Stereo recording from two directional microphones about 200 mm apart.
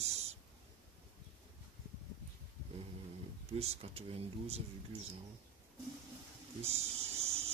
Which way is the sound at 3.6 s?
30° right (ahead or behind).